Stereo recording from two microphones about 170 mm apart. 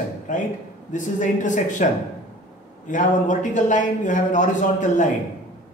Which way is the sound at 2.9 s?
50° left (ahead or behind).